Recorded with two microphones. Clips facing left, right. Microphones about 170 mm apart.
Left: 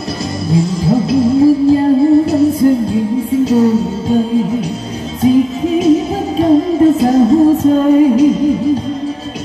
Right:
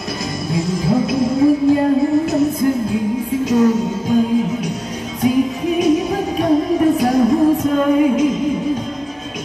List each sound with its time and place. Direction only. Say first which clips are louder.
0.5 s music: left 5 dB; 30° left (ahead or behind)
5.2 s music: left 5 dB; 30° left (ahead or behind)